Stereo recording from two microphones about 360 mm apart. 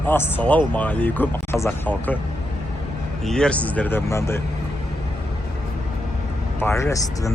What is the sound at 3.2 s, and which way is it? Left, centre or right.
Speech, centre.